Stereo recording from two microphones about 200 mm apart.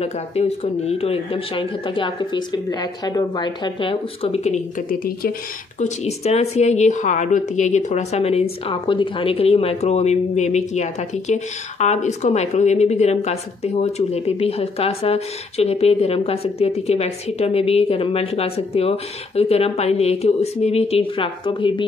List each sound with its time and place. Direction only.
0.0 s speech: 30° left (ahead or behind)
5.8 s a woman's voice: 35° left (ahead or behind)